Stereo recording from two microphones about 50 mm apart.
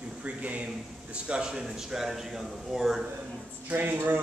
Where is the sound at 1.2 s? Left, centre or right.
Centre.